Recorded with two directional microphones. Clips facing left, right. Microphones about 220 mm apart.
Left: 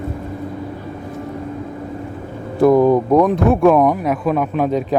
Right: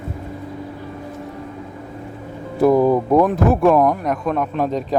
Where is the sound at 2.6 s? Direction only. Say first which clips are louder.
Left 2 dB; 5° right (ahead or behind).